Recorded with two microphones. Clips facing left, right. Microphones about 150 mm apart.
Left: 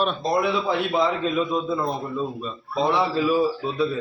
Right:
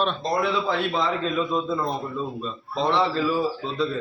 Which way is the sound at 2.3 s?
5° left (ahead or behind).